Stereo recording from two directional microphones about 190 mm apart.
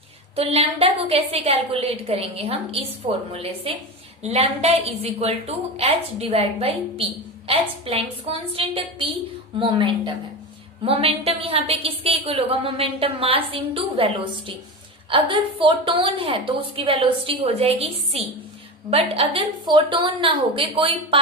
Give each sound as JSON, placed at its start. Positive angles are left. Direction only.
{"t": 0.3, "sound": "a woman's voice", "side_deg": -30}